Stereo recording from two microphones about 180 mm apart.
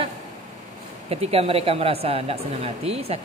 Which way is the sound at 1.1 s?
35° right (ahead or behind).